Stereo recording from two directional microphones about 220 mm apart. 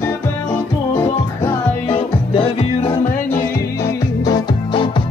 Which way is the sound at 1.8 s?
25° left (ahead or behind).